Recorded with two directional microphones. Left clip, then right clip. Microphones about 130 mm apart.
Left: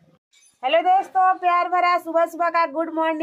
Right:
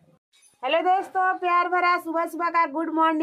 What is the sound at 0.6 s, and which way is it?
A woman's voice, 10° right (ahead or behind).